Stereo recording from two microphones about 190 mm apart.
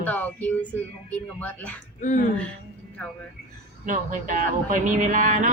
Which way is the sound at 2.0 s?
40° left (ahead or behind).